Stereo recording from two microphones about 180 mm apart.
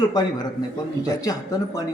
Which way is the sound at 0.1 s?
20° left (ahead or behind).